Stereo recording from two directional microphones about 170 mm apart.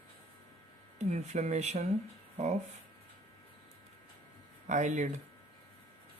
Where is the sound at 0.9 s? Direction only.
40° right (ahead or behind).